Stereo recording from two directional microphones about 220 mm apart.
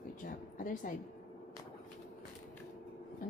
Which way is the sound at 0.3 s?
40° left (ahead or behind).